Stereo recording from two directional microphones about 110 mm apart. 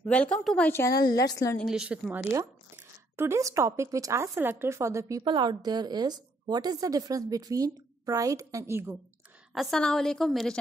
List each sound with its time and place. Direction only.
0.0 s a woman's voice: 10° left (ahead or behind)
0.7 s a woman's voice: 20° left (ahead or behind)
1.6 s a woman's voice: 5° right (ahead or behind)
2.7 s speech: 25° right (ahead or behind)
5.2 s a woman's voice: 45° right (ahead or behind); by 8.9 s 25° right (ahead or behind)
9.5 s a woman's voice: centre (ahead or behind)